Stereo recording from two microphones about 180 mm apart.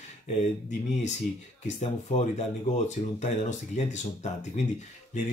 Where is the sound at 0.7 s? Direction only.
40° left (ahead or behind).